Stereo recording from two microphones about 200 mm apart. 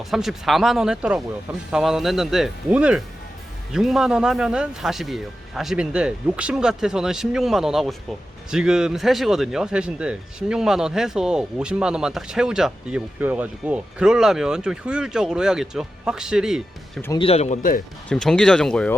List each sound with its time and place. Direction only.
0.0 s speech: centre (ahead or behind)
17.2 s speech: 30° left (ahead or behind)
18.1 s speech: 5° left (ahead or behind)